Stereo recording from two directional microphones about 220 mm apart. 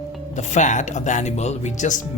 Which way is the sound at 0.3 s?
35° left (ahead or behind).